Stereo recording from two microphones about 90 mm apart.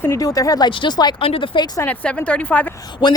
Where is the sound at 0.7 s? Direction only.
60° left (ahead or behind).